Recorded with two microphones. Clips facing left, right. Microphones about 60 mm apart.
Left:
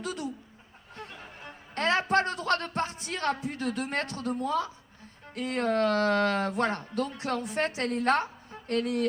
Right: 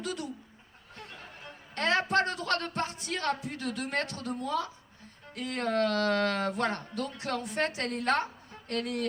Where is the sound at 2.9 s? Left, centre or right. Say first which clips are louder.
Left 1 dB; left.